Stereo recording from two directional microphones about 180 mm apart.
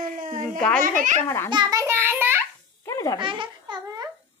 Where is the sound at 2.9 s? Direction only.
20° left (ahead or behind).